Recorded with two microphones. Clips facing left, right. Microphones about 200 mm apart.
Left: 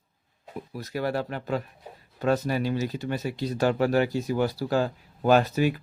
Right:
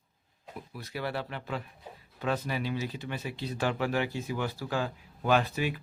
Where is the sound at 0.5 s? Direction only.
40° left (ahead or behind).